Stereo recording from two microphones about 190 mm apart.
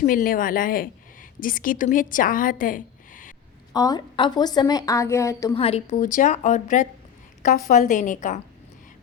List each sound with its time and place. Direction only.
0.0 s a woman's voice: 45° left (ahead or behind)
3.7 s a woman's voice: 20° left (ahead or behind)
5.5 s a woman's voice: 30° left (ahead or behind)